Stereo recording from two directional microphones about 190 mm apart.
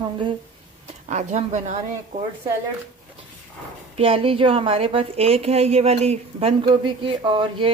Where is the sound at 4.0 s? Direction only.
30° right (ahead or behind).